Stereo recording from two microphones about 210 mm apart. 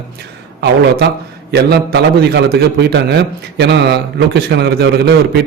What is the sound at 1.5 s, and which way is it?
A man's voice, 50° right (ahead or behind).